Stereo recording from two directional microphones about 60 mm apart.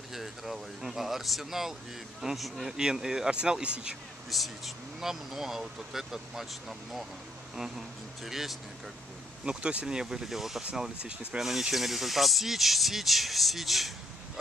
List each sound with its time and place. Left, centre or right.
0.1 s a sound: centre
2.2 s speech: centre
4.3 s speech: centre
9.4 s speech: centre
10.6 s speech: centre
11.3 s speech: centre